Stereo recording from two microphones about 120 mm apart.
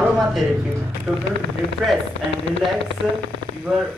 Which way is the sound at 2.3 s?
55° left (ahead or behind).